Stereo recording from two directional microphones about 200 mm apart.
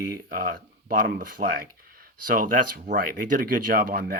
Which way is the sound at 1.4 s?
35° right (ahead or behind).